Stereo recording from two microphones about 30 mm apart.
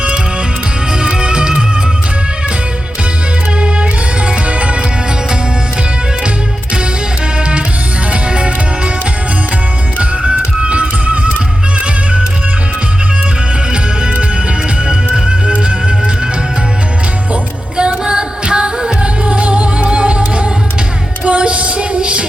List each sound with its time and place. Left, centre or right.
0.9 s music: right
4.4 s music: right
7.3 s music: right
10.0 s music: right
14.8 s music: right
17.7 s music: right
19.2 s music: right